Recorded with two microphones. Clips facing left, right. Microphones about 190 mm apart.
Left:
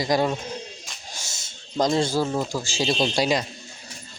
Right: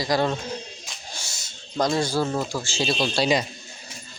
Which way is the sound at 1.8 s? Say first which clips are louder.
Left 1 dB; 20° left (ahead or behind).